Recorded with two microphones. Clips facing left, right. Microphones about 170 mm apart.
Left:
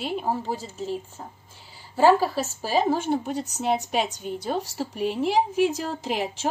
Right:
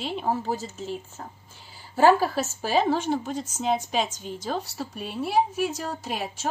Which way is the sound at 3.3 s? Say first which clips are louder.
Left 1 dB; 65° left (ahead or behind).